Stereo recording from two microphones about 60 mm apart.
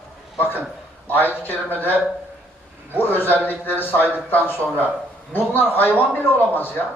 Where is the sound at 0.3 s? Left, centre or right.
Left.